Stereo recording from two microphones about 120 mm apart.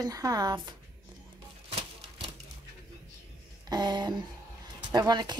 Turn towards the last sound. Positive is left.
turn(degrees=-35)  # may be behind; listen again after turning